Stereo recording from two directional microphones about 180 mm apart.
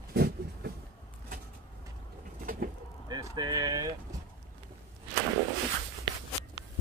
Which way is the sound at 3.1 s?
25° right (ahead or behind).